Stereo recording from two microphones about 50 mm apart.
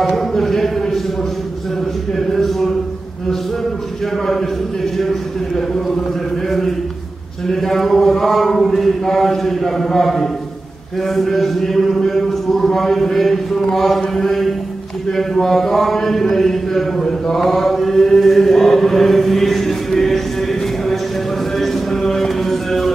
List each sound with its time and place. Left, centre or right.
0.0 s a sound: centre
2.1 s speech: centre
7.4 s speech: centre